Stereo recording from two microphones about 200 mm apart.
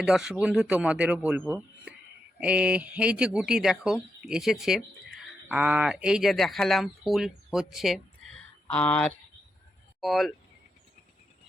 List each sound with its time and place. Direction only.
0.0 s speech: 5° right (ahead or behind)